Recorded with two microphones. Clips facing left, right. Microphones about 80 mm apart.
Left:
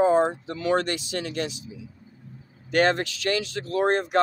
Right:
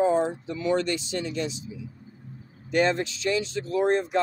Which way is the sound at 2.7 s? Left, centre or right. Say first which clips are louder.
Left 2 dB; left.